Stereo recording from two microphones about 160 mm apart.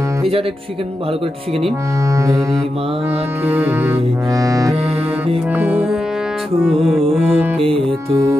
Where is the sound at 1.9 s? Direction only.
20° right (ahead or behind).